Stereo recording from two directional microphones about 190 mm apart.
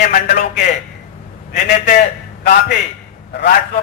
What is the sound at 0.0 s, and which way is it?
Speech, 40° left (ahead or behind).